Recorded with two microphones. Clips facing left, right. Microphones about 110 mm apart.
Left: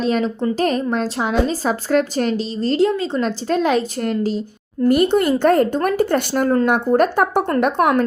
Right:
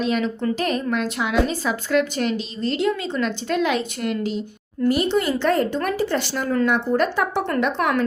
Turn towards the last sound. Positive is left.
turn(degrees=45)  # may be behind; listen again after turning